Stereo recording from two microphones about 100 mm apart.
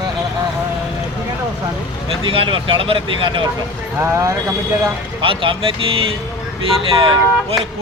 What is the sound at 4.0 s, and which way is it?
Speech, 30° right (ahead or behind).